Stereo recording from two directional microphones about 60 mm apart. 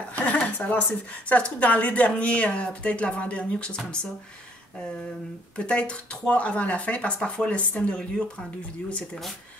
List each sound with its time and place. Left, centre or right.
0.1 s a sound: left
0.6 s speech: left
5.6 s speech: centre